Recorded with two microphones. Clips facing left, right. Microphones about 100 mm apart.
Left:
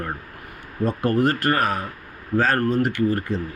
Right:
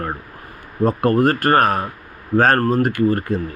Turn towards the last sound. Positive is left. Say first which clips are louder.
# right 4 dB
turn(degrees=-45)  # may be behind; listen again after turning